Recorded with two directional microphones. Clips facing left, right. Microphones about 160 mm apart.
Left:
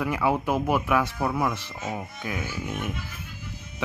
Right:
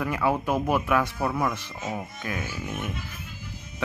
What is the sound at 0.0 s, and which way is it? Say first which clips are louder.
Speech: left 1 dB; 15° left (ahead or behind).